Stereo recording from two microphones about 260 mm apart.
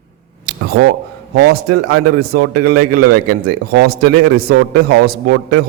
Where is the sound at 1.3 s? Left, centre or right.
Right.